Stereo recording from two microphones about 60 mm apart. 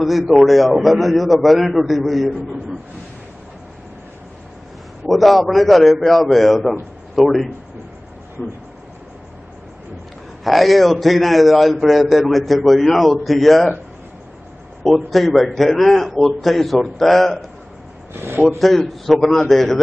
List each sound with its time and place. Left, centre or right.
0.0 s a man's voice: centre
5.0 s a man's voice: centre
10.4 s a man's voice: centre
14.8 s a man's voice: centre
18.1 s speech: right
18.6 s a man's voice: centre